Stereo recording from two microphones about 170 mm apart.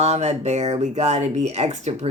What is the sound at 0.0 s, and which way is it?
Speech, 40° right (ahead or behind).